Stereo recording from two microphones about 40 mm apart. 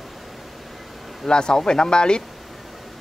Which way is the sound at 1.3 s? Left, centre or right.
Centre.